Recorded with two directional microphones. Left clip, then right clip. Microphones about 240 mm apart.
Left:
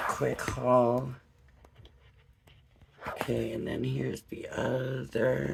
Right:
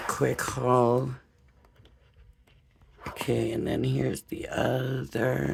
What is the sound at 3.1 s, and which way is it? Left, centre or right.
Speech, right.